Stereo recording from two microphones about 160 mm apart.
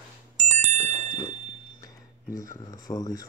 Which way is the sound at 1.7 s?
20° left (ahead or behind).